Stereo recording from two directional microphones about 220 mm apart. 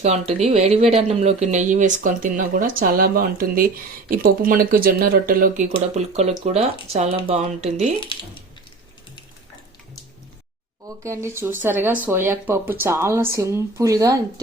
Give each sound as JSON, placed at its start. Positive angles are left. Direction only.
{"t": 0.0, "sound": "speech", "side_deg": -30}
{"t": 10.8, "sound": "speech", "side_deg": -15}